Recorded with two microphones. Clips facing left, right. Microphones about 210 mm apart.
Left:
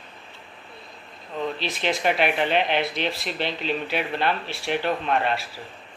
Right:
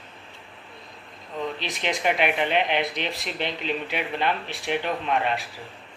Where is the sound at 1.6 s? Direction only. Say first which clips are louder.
Left 2 dB; 15° right (ahead or behind).